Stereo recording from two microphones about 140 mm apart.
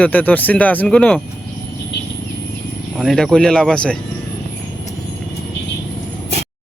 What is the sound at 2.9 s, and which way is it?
Speech, centre (ahead or behind).